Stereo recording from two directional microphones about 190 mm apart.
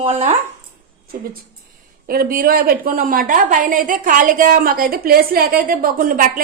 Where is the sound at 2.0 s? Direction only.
50° right (ahead or behind).